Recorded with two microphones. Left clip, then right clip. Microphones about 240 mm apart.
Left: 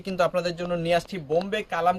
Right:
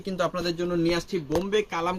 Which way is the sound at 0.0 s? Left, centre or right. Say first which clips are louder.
Left 3 dB; left.